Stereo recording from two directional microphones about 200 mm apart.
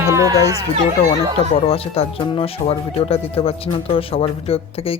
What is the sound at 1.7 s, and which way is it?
Speech, 30° left (ahead or behind).